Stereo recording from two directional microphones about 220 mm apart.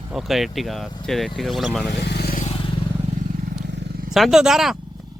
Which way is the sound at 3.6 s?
50° right (ahead or behind).